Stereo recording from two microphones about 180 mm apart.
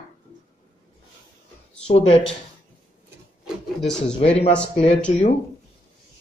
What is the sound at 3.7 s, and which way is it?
Speech, centre (ahead or behind).